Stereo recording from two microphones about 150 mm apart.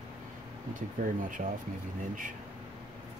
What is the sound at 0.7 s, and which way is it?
Speech, 60° right (ahead or behind).